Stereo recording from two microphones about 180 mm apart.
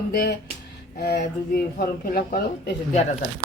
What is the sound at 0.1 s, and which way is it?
Speech, 65° left (ahead or behind).